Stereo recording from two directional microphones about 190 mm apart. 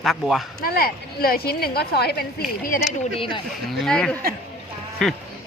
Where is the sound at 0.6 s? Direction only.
50° left (ahead or behind).